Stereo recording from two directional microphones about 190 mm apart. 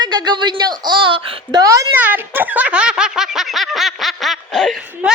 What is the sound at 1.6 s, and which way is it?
A woman's voice, 15° right (ahead or behind).